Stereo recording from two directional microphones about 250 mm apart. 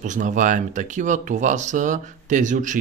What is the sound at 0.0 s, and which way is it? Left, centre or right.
Speech, right.